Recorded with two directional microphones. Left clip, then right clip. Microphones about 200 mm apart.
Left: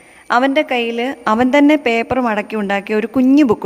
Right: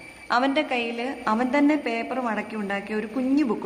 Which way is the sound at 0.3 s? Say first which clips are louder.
Left 9 dB; 45° left (ahead or behind).